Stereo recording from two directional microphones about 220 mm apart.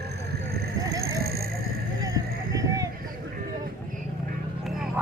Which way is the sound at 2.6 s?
15° right (ahead or behind).